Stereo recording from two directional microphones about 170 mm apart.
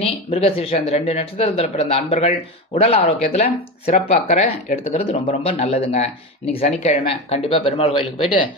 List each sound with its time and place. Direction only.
0.0 s speech: 35° left (ahead or behind)